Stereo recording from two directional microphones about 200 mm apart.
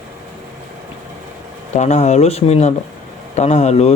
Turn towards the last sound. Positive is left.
turn(degrees=35)  # may be behind; listen again after turning